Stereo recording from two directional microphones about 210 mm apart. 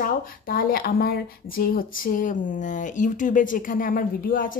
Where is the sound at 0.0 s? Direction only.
45° left (ahead or behind).